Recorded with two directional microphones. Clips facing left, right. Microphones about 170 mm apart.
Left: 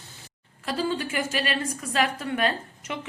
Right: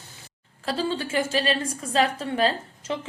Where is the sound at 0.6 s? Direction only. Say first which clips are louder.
Right 1 dB; 30° right (ahead or behind).